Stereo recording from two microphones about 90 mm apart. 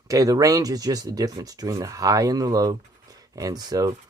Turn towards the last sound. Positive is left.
turn(degrees=-45)  # may be behind; listen again after turning